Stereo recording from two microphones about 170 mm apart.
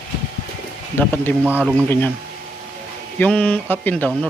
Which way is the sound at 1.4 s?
10° right (ahead or behind).